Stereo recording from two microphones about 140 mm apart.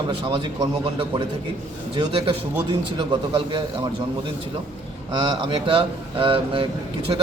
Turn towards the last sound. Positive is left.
turn(degrees=-40)  # may be behind; listen again after turning